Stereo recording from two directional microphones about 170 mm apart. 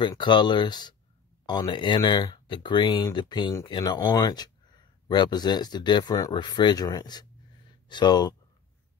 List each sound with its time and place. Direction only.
0.0 s speech: 25° left (ahead or behind)